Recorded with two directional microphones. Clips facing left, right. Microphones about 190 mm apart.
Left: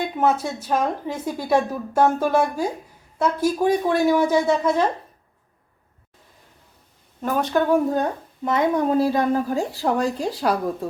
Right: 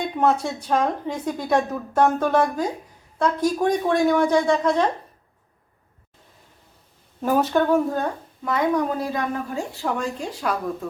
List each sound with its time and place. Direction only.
0.0 s speech: 5° left (ahead or behind)
7.2 s speech: 5° right (ahead or behind)
8.4 s a woman's voice: 25° left (ahead or behind)